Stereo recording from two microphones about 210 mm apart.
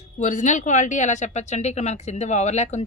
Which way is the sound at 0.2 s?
35° left (ahead or behind).